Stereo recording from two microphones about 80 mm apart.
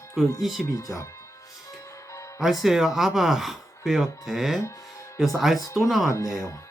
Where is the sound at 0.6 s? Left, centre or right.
Left.